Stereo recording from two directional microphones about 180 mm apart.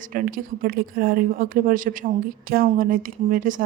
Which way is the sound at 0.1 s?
50° right (ahead or behind).